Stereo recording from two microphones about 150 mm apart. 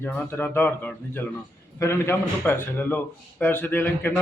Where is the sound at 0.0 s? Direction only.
15° left (ahead or behind).